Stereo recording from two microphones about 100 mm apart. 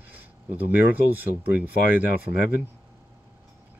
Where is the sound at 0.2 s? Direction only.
20° right (ahead or behind).